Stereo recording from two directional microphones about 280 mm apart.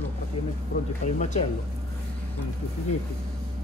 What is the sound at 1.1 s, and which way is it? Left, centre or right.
Speech, left.